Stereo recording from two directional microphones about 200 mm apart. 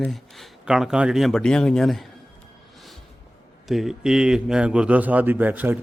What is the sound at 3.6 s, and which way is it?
A man's voice, centre (ahead or behind).